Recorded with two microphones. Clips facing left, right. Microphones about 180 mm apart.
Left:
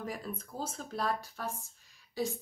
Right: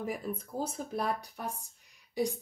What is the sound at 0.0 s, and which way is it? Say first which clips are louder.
Speech: right 4 dB; 10° right (ahead or behind).